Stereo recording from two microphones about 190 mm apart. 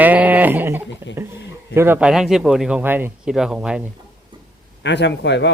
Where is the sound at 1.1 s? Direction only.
70° left (ahead or behind).